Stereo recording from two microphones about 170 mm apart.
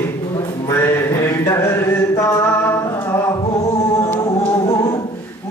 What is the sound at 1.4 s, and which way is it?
Singing, 15° left (ahead or behind).